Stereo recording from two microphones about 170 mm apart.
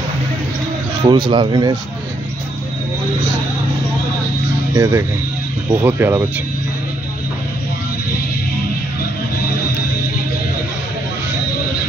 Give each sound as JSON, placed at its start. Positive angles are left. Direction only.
{"t": 1.0, "sound": "speech", "side_deg": -25}
{"t": 4.7, "sound": "speech", "side_deg": -15}